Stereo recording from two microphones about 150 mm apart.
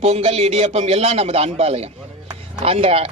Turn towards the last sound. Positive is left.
turn(degrees=-40)  # may be behind; listen again after turning